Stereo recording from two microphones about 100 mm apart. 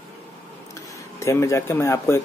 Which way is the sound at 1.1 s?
30° left (ahead or behind).